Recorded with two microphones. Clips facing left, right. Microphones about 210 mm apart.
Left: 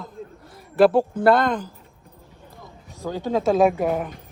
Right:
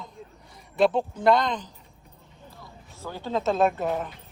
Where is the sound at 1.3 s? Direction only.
55° left (ahead or behind).